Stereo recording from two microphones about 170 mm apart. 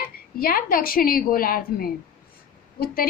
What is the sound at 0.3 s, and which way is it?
A woman's voice, 60° left (ahead or behind).